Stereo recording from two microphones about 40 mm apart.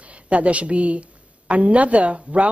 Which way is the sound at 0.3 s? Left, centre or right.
Right.